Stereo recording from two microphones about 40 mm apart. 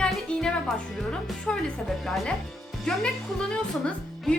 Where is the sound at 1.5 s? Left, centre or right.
Centre.